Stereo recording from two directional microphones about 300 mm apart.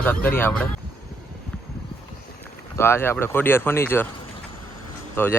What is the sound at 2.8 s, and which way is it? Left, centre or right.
A man's voice, centre.